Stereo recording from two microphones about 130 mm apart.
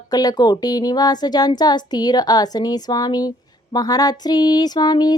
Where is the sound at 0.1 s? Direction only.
30° left (ahead or behind).